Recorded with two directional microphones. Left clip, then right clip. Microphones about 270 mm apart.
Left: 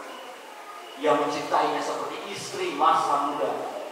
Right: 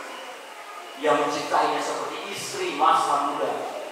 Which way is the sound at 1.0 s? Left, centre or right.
Centre.